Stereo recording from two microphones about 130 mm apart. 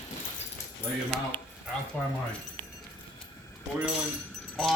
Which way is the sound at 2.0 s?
10° left (ahead or behind).